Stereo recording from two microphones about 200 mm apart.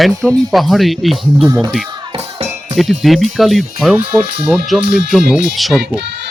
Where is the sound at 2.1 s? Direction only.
30° right (ahead or behind).